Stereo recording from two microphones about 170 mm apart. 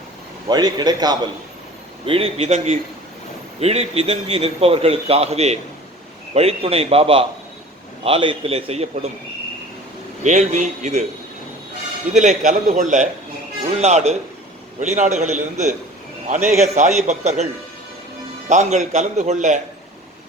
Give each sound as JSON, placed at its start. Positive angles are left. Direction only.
{"t": 0.4, "sound": "a man's voice", "side_deg": -25}
{"t": 2.0, "sound": "a man's voice", "side_deg": -35}
{"t": 10.2, "sound": "a man's voice", "side_deg": -45}
{"t": 12.1, "sound": "a man's voice", "side_deg": -45}
{"t": 18.4, "sound": "a man's voice", "side_deg": -45}